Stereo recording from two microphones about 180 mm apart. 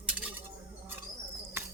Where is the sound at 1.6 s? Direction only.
15° right (ahead or behind).